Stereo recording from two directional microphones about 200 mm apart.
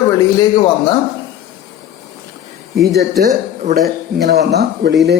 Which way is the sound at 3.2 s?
50° right (ahead or behind).